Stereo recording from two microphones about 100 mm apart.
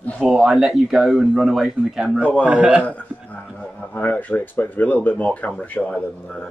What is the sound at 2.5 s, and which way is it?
Speech, 10° right (ahead or behind).